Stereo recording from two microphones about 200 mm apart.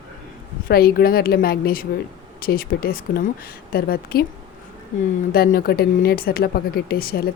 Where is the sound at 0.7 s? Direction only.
50° left (ahead or behind).